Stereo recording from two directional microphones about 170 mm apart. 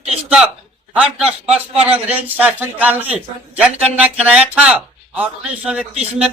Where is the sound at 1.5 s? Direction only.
35° right (ahead or behind).